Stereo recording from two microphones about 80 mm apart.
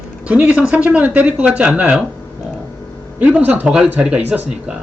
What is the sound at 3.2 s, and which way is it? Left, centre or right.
A woman's voice, centre.